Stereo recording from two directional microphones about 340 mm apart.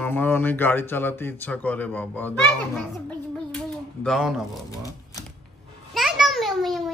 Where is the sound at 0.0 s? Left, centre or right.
Centre.